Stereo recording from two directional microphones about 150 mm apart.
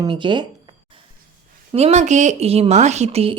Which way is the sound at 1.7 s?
45° right (ahead or behind).